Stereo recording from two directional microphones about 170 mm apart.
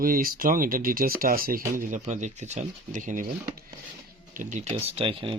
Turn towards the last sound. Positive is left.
turn(degrees=-30)  # may be behind; listen again after turning